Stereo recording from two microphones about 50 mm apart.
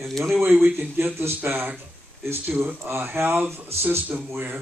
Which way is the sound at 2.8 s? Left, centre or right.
Right.